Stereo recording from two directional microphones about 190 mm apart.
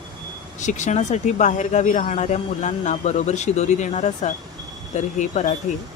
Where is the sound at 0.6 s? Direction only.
40° left (ahead or behind).